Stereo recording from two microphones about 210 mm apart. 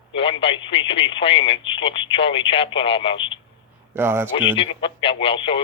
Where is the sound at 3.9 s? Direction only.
10° right (ahead or behind).